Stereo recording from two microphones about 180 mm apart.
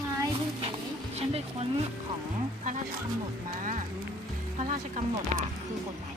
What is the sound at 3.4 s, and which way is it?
Speech, 50° right (ahead or behind).